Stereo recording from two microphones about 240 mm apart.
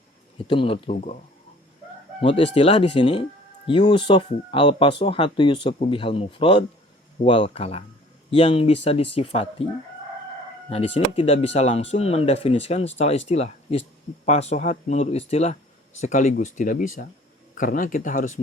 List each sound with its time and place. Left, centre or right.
0.4 s speech: left
2.2 s speech: left
10.7 s speech: left